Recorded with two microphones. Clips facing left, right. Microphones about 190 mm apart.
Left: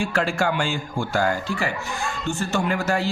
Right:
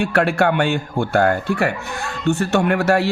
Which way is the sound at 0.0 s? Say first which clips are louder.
Right 6 dB; 60° right (ahead or behind).